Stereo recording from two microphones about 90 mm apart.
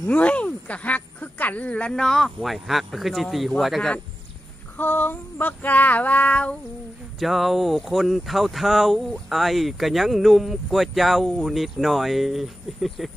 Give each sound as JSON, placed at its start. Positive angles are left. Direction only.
{"t": 0.1, "sound": "speech", "side_deg": 15}
{"t": 4.7, "sound": "child singing", "side_deg": 20}
{"t": 7.2, "sound": "speech", "side_deg": 0}